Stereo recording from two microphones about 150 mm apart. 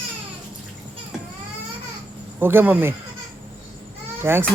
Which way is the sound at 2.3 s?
15° right (ahead or behind).